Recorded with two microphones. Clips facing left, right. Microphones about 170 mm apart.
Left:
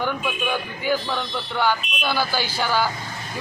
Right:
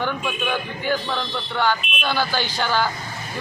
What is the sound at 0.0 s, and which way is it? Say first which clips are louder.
Speech: even; 10° left (ahead or behind).